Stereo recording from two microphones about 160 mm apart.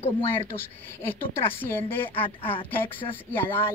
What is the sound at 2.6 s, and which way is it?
Speech, 10° left (ahead or behind).